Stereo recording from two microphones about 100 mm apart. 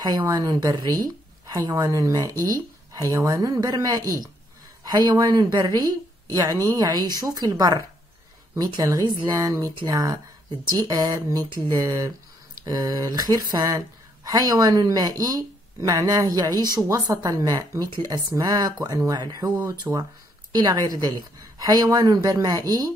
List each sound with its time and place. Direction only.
0.0 s a woman's voice: 40° right (ahead or behind)